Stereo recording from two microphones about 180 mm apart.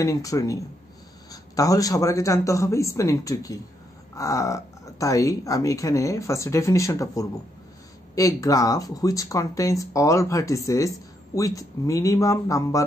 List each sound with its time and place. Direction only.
0.0 s speech: 20° left (ahead or behind)